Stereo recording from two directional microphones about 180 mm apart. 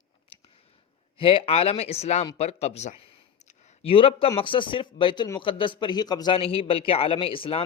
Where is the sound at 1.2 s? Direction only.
30° left (ahead or behind).